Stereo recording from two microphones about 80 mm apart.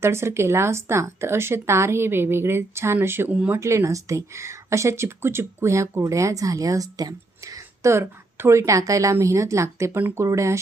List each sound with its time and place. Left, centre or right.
0.0 s speech: right